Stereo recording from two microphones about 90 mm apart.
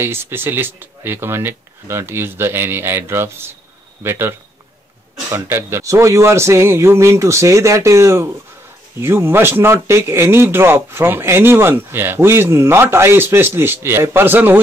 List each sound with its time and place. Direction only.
0.0 s speech: 25° right (ahead or behind)